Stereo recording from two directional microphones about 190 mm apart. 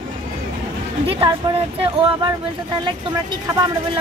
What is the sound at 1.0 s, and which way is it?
Speech, 25° right (ahead or behind).